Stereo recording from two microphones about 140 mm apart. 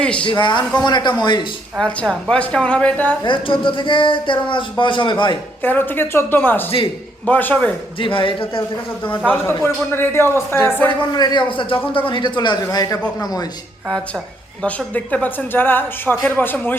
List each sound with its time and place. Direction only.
0.0 s a man's voice: 10° left (ahead or behind)
0.3 s speech: 35° left (ahead or behind)
1.8 s speech: 5° left (ahead or behind)
3.2 s speech: 35° left (ahead or behind)
5.6 s speech: 15° left (ahead or behind)
7.9 s speech: 40° left (ahead or behind)
9.2 s speech: 20° left (ahead or behind)
11.1 s speech: 30° left (ahead or behind)
14.6 s speech: 10° left (ahead or behind)